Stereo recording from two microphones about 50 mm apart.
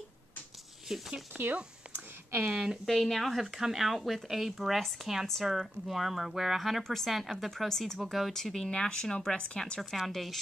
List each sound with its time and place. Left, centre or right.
0.8 s speech: centre
2.5 s speech: centre
2.9 s speech: centre
3.3 s speech: centre
9.8 s speech: centre